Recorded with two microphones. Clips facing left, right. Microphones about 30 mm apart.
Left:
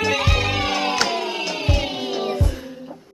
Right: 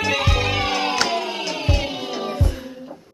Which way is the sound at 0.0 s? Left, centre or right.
Centre.